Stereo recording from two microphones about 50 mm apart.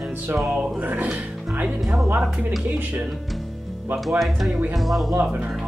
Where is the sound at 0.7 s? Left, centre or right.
Right.